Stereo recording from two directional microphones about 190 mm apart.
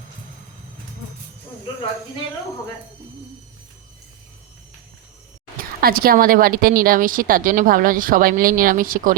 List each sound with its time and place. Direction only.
5.5 s speech: 50° right (ahead or behind)